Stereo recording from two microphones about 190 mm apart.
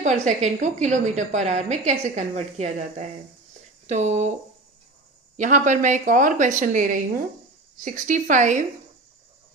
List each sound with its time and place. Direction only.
0.0 s a woman's voice: 40° right (ahead or behind)
5.4 s a woman's voice: 40° right (ahead or behind)
7.9 s a woman's voice: 45° right (ahead or behind)